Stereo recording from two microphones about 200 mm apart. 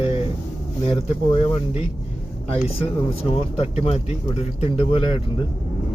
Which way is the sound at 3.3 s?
30° left (ahead or behind).